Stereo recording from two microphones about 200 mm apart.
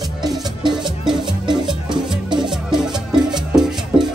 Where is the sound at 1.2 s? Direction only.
20° right (ahead or behind).